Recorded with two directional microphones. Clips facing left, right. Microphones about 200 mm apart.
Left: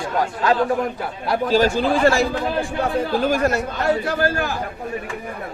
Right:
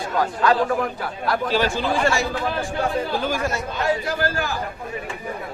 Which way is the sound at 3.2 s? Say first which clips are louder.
Left 5 dB; 45° left (ahead or behind).